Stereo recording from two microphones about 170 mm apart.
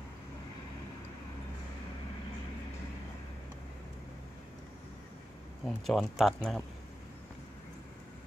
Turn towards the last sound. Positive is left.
turn(degrees=0)  # may be behind; listen again after turning